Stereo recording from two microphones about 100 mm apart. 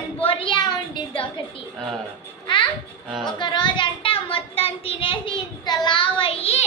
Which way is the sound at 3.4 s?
50° left (ahead or behind).